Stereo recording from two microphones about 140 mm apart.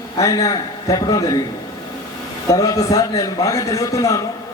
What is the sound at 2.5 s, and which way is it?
A man's voice, 25° left (ahead or behind).